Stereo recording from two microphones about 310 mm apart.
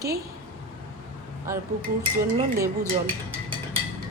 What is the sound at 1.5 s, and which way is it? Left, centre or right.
Speech, centre.